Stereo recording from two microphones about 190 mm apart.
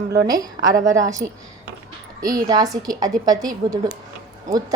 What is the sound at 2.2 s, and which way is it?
A woman's voice, 20° right (ahead or behind).